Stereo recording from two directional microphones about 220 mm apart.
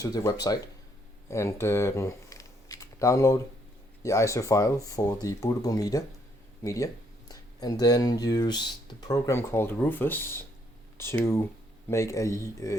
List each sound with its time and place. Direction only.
0.0 s speech: 15° left (ahead or behind)